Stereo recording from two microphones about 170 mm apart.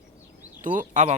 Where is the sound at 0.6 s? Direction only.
50° right (ahead or behind).